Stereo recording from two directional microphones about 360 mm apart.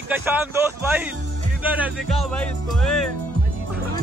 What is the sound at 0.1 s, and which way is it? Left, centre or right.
Speech, centre.